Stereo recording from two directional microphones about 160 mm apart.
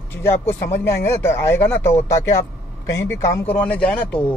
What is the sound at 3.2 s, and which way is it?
Speech, 10° left (ahead or behind).